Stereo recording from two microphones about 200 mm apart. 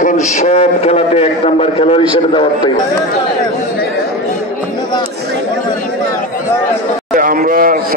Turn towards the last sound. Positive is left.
turn(degrees=-45)  # may be behind; listen again after turning